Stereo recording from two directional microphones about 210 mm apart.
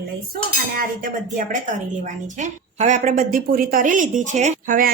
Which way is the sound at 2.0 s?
35° right (ahead or behind).